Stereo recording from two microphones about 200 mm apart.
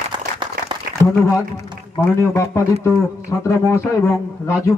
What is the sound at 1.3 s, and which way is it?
A man's voice, 15° left (ahead or behind).